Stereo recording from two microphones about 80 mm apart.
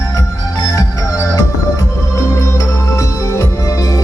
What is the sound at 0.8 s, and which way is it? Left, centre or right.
Music, left.